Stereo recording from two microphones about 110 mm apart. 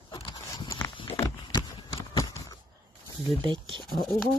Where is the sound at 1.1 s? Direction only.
25° left (ahead or behind).